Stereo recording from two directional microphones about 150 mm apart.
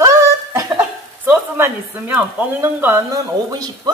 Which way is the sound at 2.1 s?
15° right (ahead or behind).